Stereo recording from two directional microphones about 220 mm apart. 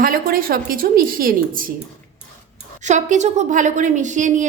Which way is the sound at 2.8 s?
35° right (ahead or behind).